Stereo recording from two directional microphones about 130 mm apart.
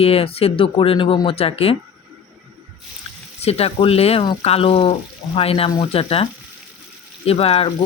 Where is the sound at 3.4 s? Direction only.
50° left (ahead or behind).